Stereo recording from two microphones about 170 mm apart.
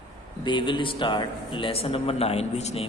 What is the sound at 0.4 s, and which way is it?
A man's voice, 30° left (ahead or behind).